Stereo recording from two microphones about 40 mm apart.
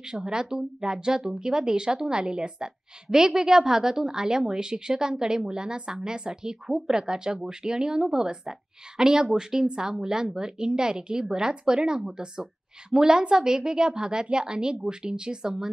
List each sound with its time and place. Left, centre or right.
0.0 s a woman's voice: centre